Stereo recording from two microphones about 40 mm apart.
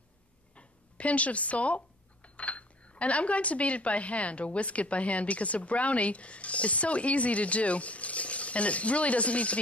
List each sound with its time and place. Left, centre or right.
0.6 s speech: left